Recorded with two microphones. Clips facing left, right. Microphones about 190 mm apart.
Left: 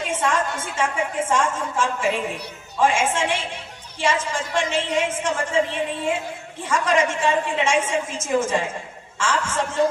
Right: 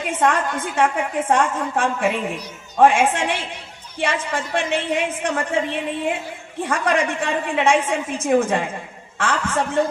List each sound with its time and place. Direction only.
0.0 s a woman's voice: 60° right (ahead or behind)